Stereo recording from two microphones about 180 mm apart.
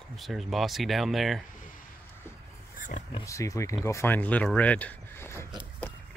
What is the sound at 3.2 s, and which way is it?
Speech, 15° left (ahead or behind).